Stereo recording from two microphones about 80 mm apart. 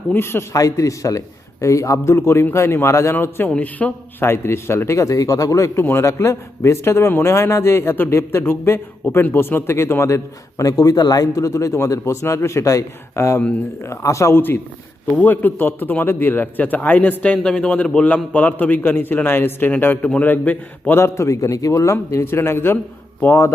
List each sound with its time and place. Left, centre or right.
0.1 s a man's voice: left
0.5 s a man's voice: left; by 4.3 s centre
4.3 s a man's voice: left
5.8 s a man's voice: left
10.6 s a man's voice: left
14.3 s a man's voice: left
21.0 s a man's voice: left